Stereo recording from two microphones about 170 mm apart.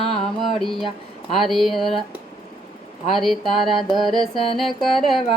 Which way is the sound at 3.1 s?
Centre (ahead or behind).